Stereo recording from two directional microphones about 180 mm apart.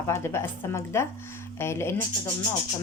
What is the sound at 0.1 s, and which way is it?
Speech, 15° left (ahead or behind).